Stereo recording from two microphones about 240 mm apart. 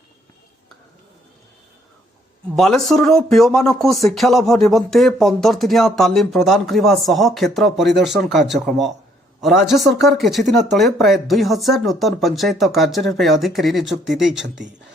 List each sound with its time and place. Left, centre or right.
2.6 s speech: centre
14.4 s speech: right